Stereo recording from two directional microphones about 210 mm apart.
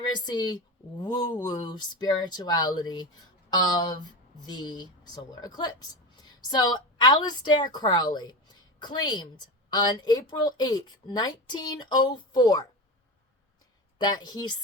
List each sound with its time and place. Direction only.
0.3 s a woman's voice: 20° left (ahead or behind)
14.0 s a woman's voice: 20° left (ahead or behind)